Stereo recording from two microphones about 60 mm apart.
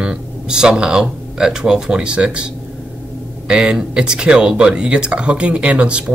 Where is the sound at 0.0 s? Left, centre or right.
Centre.